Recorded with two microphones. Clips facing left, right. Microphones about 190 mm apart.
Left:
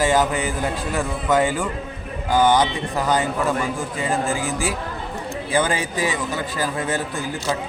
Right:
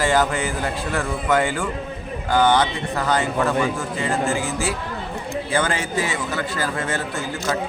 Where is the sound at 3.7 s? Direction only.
15° left (ahead or behind).